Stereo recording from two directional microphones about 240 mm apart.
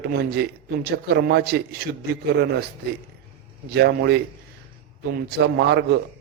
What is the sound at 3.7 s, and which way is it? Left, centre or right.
A man's voice, right.